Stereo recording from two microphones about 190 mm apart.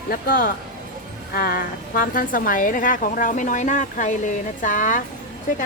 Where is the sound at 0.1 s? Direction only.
50° left (ahead or behind).